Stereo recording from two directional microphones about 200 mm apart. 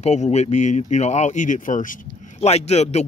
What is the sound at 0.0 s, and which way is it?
Speech, 35° left (ahead or behind).